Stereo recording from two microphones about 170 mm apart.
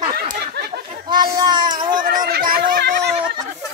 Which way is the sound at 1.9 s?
55° right (ahead or behind).